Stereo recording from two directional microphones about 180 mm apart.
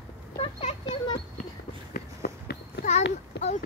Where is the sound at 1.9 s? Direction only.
60° left (ahead or behind).